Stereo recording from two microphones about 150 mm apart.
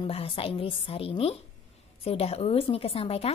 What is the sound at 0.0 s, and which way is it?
A woman's voice, 40° left (ahead or behind).